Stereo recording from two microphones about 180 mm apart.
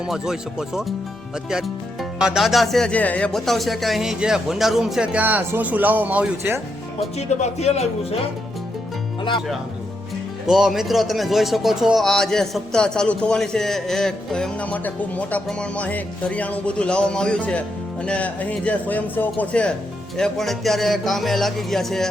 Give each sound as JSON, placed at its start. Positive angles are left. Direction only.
{"t": 0.0, "sound": "speech", "side_deg": -5}
{"t": 7.2, "sound": "speech", "side_deg": 35}
{"t": 10.4, "sound": "a man's voice", "side_deg": 0}